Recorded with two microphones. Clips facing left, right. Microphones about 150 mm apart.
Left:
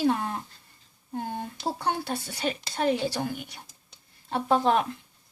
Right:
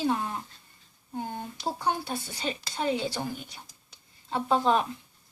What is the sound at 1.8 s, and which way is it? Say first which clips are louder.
A woman's voice: even; 65° left (ahead or behind).